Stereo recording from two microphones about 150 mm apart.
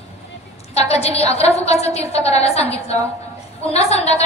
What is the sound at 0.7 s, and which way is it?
A woman's voice, 45° left (ahead or behind).